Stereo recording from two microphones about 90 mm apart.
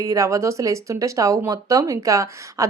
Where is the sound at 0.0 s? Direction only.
40° right (ahead or behind).